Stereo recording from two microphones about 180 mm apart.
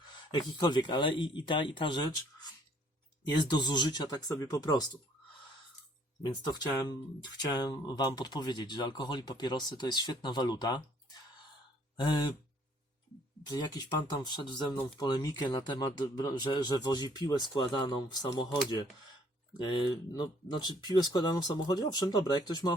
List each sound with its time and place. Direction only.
0.1 s speech: 25° left (ahead or behind)
3.4 s speech: 25° left (ahead or behind)
6.2 s speech: 25° left (ahead or behind)
13.5 s speech: 25° left (ahead or behind)
19.5 s speech: 25° left (ahead or behind)